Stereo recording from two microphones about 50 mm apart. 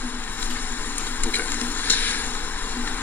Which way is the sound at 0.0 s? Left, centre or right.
Left.